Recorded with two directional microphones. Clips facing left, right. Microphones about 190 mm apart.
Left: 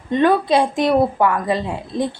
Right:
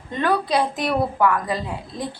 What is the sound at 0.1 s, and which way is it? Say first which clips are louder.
A woman's voice: left 6 dB; 20° left (ahead or behind).